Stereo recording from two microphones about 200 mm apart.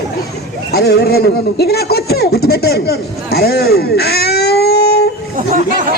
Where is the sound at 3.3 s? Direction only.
50° left (ahead or behind).